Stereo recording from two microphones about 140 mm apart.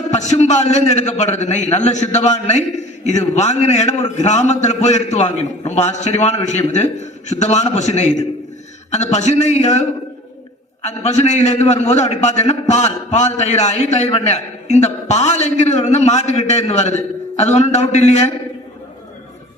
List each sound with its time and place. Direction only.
0.1 s a man's voice: 55° left (ahead or behind)
10.8 s a man's voice: 50° left (ahead or behind)